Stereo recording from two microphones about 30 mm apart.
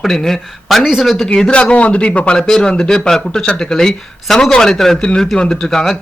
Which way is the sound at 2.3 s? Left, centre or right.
Centre.